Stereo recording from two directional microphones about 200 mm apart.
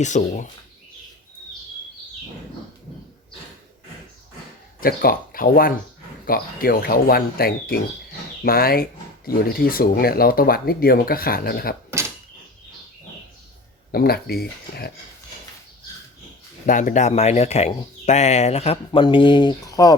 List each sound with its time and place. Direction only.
0.0 s speech: 35° left (ahead or behind)
4.8 s speech: 45° left (ahead or behind)
11.9 s a sound: 15° right (ahead or behind)
13.9 s speech: 50° left (ahead or behind)
16.6 s speech: 40° left (ahead or behind); by 19.9 s 20° left (ahead or behind)